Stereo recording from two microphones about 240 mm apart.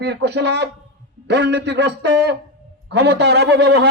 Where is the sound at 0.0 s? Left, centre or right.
Right.